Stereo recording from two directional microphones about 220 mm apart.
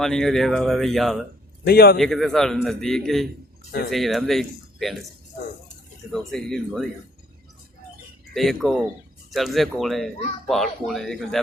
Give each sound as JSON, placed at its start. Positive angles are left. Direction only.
{"t": 0.0, "sound": "speech", "side_deg": 0}
{"t": 1.6, "sound": "speech", "side_deg": 45}
{"t": 2.0, "sound": "speech", "side_deg": 0}
{"t": 6.1, "sound": "speech", "side_deg": 0}
{"t": 8.3, "sound": "speech", "side_deg": 0}